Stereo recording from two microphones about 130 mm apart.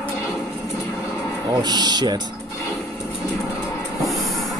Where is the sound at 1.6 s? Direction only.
35° right (ahead or behind).